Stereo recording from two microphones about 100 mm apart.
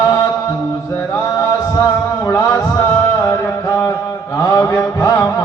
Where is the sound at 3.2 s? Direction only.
35° left (ahead or behind).